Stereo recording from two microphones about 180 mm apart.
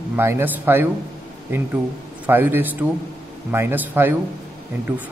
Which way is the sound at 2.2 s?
10° right (ahead or behind).